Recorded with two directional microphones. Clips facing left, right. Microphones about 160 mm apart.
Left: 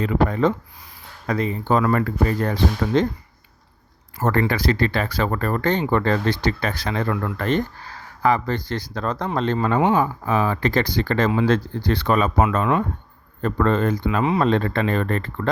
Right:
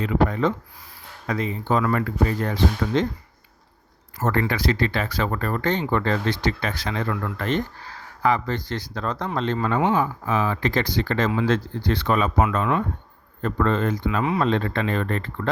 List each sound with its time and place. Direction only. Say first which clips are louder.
0.0 s speech: left 2 dB; 40° left (ahead or behind)
4.2 s speech: left 2 dB; 40° left (ahead or behind)
9.6 s speech: left 3 dB; 30° left (ahead or behind)
13.4 s speech: left 2 dB; 45° left (ahead or behind)
14.2 s speech: left 3 dB; 30° left (ahead or behind)
14.4 s speech: left 3 dB; 45° left (ahead or behind)